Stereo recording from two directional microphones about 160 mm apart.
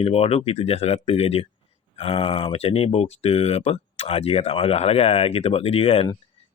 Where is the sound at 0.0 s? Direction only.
40° left (ahead or behind).